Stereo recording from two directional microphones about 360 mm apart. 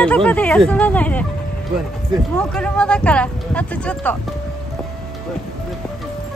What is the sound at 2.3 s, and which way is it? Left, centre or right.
Speech, centre.